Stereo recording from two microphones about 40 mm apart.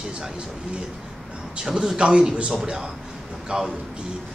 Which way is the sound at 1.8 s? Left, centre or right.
Right.